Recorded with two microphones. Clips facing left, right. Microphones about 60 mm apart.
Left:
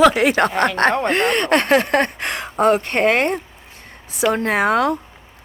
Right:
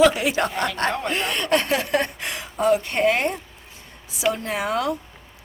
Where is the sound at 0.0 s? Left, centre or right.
Left.